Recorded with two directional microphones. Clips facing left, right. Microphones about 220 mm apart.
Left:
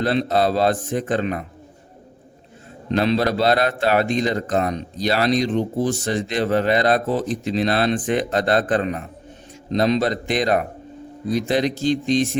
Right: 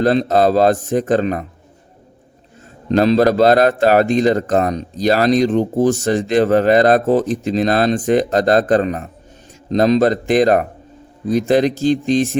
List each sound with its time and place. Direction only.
0.0 s a man's voice: 45° right (ahead or behind)
2.9 s a man's voice: 40° right (ahead or behind)